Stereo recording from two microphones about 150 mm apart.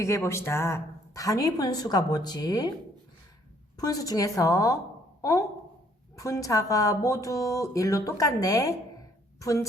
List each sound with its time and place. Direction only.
0.0 s a woman's voice: 20° left (ahead or behind)
3.8 s a woman's voice: 25° left (ahead or behind)